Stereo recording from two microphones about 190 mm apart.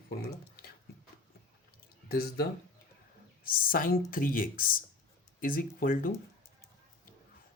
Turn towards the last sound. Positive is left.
turn(degrees=45)  # may be behind; listen again after turning